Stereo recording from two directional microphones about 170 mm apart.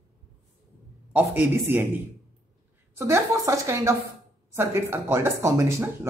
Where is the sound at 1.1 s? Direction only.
10° right (ahead or behind).